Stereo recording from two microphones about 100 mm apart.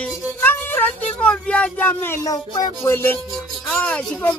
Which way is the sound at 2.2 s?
35° left (ahead or behind).